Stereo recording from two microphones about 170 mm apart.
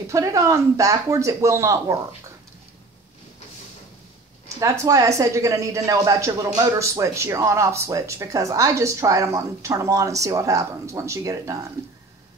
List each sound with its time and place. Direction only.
0.1 s speech: 20° right (ahead or behind)
4.6 s speech: 20° right (ahead or behind)